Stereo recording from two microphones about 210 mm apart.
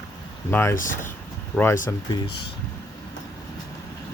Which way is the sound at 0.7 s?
40° left (ahead or behind).